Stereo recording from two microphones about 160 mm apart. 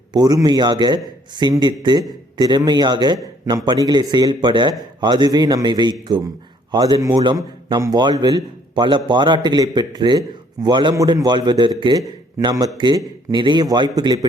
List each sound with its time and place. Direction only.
0.1 s a man's voice: 25° right (ahead or behind)